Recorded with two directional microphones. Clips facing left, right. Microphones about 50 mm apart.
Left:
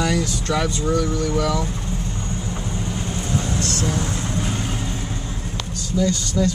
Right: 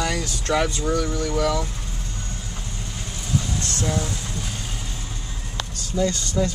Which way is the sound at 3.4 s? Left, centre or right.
Left.